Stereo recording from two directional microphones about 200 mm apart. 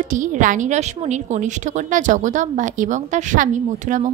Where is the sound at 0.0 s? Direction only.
40° right (ahead or behind).